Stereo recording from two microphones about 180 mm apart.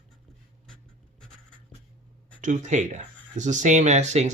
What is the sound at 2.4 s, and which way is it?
Speech, 45° right (ahead or behind).